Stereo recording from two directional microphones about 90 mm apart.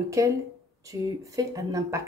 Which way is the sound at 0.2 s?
35° right (ahead or behind).